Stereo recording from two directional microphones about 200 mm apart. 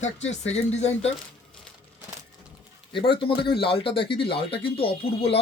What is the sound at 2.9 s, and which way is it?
Speech, 25° left (ahead or behind).